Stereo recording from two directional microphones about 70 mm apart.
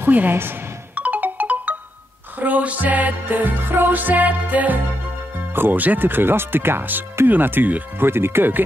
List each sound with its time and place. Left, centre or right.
0.0 s music: right
2.3 s speech: right